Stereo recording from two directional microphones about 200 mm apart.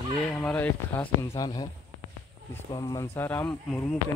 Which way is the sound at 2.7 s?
20° left (ahead or behind).